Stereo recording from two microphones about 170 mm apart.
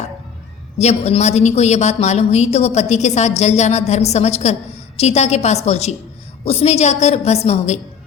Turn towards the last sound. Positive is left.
turn(degrees=40)  # may be behind; listen again after turning